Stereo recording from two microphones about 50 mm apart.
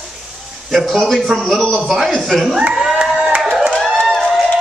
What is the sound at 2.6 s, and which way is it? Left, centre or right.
Speech, centre.